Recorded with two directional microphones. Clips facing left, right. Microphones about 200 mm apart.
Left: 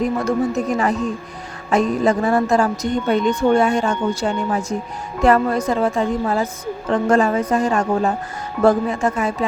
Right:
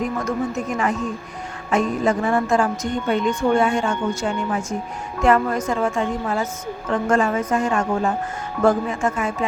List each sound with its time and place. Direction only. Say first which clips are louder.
0.0 s a woman's voice: left 4 dB; 35° left (ahead or behind)